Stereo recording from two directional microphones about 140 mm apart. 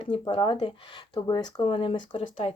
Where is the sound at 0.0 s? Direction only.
40° left (ahead or behind).